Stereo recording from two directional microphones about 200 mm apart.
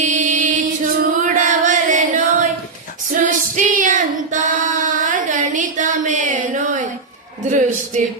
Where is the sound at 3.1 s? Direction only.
40° right (ahead or behind).